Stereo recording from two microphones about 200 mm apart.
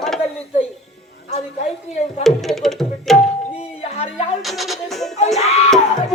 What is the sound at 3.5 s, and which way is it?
Music, 30° left (ahead or behind).